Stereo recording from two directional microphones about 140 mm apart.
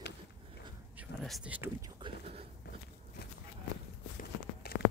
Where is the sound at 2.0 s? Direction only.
40° right (ahead or behind).